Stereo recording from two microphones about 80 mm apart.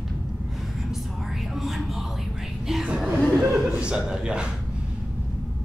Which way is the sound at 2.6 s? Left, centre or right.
Centre.